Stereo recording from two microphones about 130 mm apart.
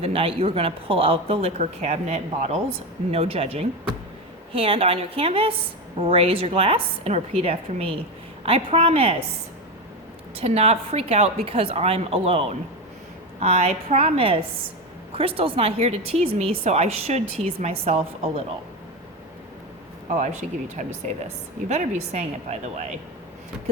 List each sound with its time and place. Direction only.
0.0 s speech: 45° right (ahead or behind)
3.1 s speech: 50° right (ahead or behind)
10.3 s a woman's voice: 50° right (ahead or behind)
20.1 s speech: 75° right (ahead or behind)
21.7 s a woman's voice: 60° right (ahead or behind)